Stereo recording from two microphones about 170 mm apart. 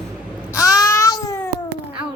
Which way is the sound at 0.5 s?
20° left (ahead or behind).